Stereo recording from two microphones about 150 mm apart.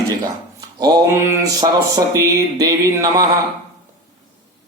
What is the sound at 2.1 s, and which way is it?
Music, 25° right (ahead or behind).